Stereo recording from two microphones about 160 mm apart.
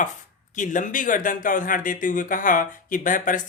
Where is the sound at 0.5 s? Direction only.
55° left (ahead or behind).